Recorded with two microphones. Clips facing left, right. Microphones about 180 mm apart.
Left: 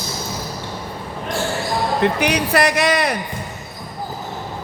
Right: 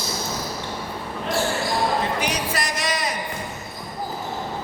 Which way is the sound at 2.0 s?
65° left (ahead or behind).